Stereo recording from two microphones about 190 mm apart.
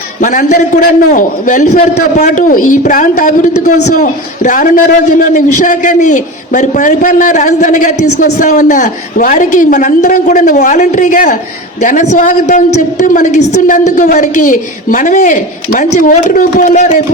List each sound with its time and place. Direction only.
0.2 s a man's voice: 45° left (ahead or behind)